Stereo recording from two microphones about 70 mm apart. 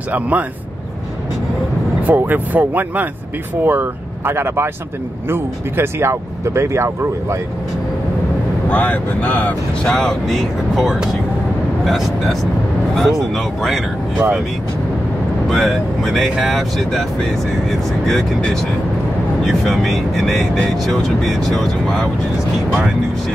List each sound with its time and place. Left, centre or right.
0.1 s speech: right
2.0 s speech: right
8.6 s speech: left
9.9 s speech: centre
15.5 s speech: centre